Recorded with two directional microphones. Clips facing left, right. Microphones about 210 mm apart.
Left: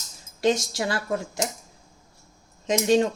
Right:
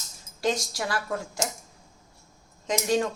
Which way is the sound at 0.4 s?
25° left (ahead or behind).